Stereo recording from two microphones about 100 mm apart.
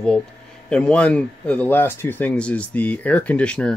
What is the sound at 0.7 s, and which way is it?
Speech, 10° left (ahead or behind).